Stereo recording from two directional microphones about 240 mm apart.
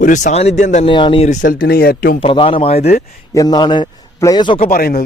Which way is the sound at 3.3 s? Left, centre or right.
Centre.